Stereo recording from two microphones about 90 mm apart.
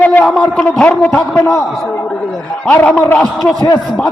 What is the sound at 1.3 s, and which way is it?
Speech, 25° left (ahead or behind).